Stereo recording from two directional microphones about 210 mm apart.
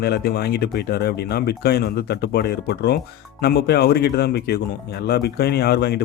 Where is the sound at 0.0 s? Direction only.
50° left (ahead or behind).